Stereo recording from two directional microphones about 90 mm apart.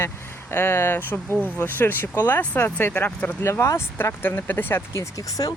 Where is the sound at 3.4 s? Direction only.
30° left (ahead or behind).